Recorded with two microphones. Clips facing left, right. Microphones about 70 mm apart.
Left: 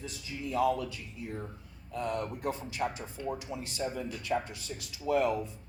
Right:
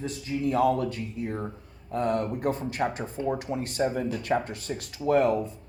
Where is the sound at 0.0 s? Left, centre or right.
Right.